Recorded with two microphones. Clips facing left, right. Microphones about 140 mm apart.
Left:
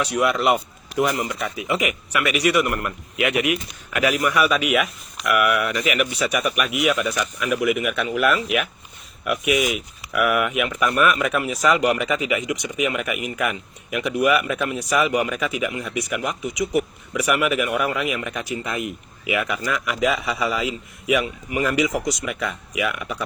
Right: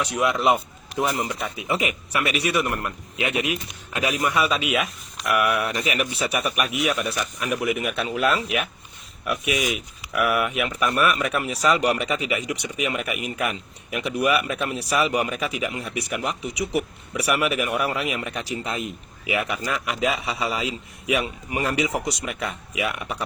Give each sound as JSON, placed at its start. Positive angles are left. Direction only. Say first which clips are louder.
{"t": 0.2, "sound": "speech", "louder": "left 1 dB", "side_deg": -20}
{"t": 1.0, "sound": "a man's voice", "louder": "left 1 dB", "side_deg": -30}